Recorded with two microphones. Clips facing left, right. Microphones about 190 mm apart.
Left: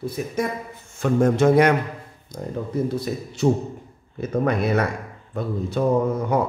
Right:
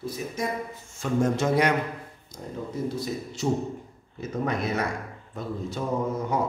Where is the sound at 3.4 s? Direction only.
60° left (ahead or behind).